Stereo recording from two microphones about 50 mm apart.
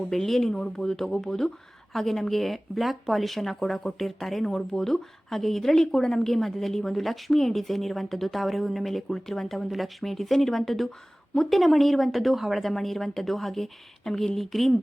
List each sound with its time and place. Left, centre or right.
0.1 s speech: centre